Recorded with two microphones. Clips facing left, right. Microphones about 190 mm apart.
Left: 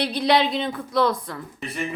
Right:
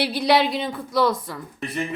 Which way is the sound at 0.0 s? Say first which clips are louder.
Right 1 dB; 5° right (ahead or behind).